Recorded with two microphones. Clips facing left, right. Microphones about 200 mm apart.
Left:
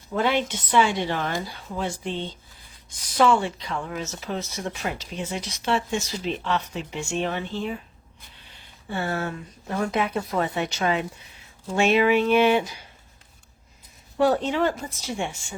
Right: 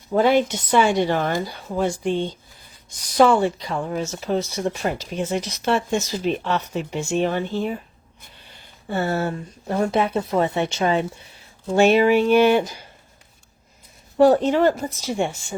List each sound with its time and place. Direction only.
0.1 s speech: 40° right (ahead or behind)
8.9 s speech: 40° right (ahead or behind)
11.7 s speech: 40° right (ahead or behind)
14.2 s speech: 40° right (ahead or behind)